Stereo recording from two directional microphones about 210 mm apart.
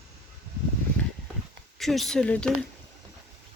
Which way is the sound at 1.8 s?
Centre (ahead or behind).